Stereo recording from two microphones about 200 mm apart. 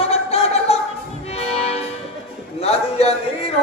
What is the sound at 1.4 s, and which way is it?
Music, 30° left (ahead or behind).